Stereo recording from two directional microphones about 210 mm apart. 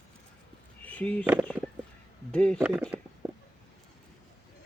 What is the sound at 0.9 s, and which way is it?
Speech, 5° left (ahead or behind).